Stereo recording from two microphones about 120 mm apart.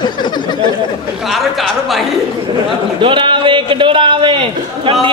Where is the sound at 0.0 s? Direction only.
40° left (ahead or behind).